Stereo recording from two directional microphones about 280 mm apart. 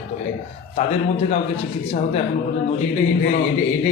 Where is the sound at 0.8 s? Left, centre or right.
Left.